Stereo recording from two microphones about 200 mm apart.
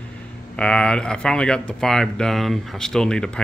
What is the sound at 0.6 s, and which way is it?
Speech, 5° left (ahead or behind).